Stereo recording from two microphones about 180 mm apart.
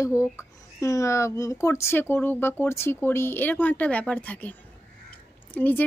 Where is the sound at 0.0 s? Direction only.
15° left (ahead or behind).